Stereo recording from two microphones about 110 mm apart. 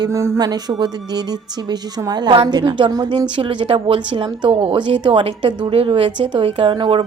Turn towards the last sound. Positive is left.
turn(degrees=-45)  # may be behind; listen again after turning